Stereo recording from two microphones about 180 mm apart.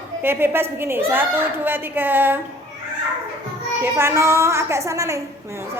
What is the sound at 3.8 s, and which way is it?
A woman's voice, 15° right (ahead or behind).